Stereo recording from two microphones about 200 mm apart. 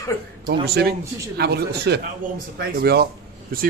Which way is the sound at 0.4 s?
55° right (ahead or behind).